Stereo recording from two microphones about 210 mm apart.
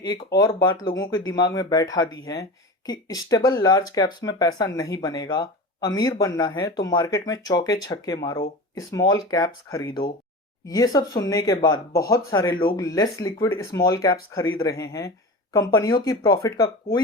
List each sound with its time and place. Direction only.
0.3 s speech: 20° left (ahead or behind)